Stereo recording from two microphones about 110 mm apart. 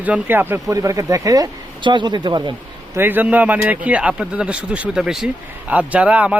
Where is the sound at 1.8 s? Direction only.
45° right (ahead or behind).